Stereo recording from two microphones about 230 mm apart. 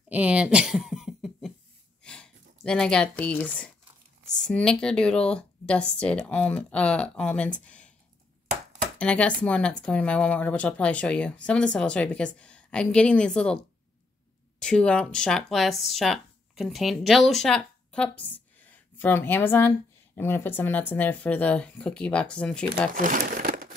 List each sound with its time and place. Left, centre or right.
0.1 s a sound: centre
4.4 s speech: centre
7.6 s a sound: centre
8.9 s speech: centre
14.6 s speech: centre
22.9 s crumpling: right